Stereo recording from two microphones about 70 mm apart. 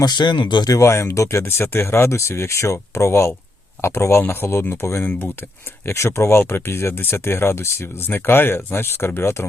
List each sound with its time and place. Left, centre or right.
0.0 s speech: left
0.8 s speech: left